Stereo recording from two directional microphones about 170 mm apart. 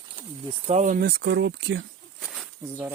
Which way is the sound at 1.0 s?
70° right (ahead or behind).